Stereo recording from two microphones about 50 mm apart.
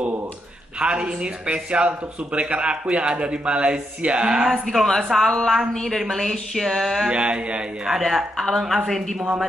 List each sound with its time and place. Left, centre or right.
0.7 s speech: right
4.5 s a woman's voice: centre
7.1 s speech: right
8.5 s speech: centre